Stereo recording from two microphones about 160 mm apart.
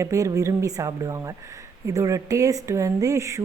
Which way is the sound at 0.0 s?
20° right (ahead or behind).